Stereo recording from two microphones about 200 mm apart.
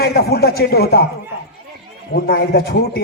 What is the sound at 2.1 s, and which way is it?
Speech, 50° left (ahead or behind).